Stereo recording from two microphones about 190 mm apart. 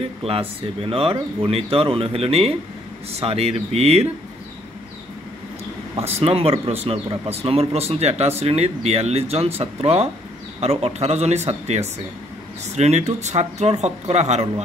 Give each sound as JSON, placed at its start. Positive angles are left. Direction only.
{"t": 0.2, "sound": "speech", "side_deg": -30}
{"t": 6.1, "sound": "speech", "side_deg": -30}